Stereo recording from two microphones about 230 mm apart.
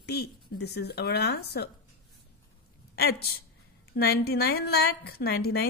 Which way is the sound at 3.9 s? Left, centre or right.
Left.